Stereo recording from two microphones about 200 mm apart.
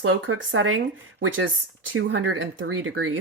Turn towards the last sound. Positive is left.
turn(degrees=-90)